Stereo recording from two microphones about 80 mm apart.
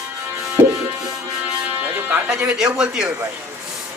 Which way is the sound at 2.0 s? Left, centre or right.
Centre.